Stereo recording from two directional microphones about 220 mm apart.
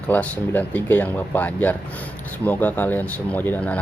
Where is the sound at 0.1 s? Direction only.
5° left (ahead or behind).